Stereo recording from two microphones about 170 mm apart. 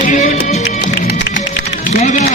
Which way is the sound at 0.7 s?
60° left (ahead or behind).